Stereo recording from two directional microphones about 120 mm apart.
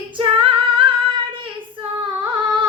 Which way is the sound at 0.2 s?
45° right (ahead or behind).